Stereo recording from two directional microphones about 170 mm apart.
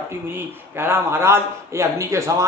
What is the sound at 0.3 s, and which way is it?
A man's voice, 15° right (ahead or behind).